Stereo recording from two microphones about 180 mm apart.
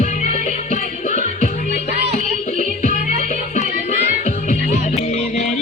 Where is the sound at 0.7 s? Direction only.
40° left (ahead or behind).